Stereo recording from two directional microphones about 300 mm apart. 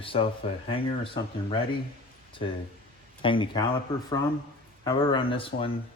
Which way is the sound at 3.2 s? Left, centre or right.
Centre.